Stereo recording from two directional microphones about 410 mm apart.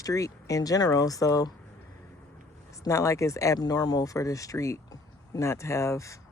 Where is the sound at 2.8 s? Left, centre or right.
Centre.